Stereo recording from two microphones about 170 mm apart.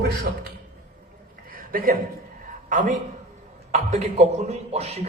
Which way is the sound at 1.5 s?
55° right (ahead or behind).